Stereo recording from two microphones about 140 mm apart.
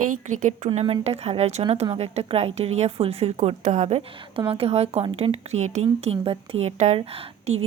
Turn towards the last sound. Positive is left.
turn(degrees=-45)  # may be behind; listen again after turning